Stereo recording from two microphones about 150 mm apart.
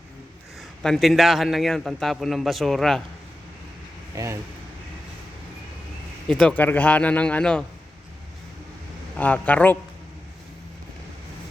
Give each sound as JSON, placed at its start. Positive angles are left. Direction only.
{"t": 0.8, "sound": "a man's voice", "side_deg": 0}
{"t": 4.1, "sound": "speech", "side_deg": -20}
{"t": 6.2, "sound": "speech", "side_deg": 5}
{"t": 9.1, "sound": "speech", "side_deg": 10}